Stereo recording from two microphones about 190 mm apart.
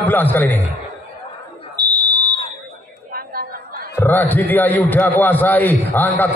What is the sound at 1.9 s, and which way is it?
Fire alarm, 20° right (ahead or behind).